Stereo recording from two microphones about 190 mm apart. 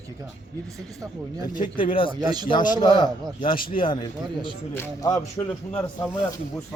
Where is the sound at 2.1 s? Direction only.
20° right (ahead or behind).